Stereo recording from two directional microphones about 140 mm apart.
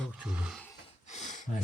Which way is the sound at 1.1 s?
55° left (ahead or behind).